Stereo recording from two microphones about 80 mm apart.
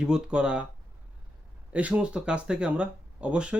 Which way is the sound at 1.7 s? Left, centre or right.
Centre.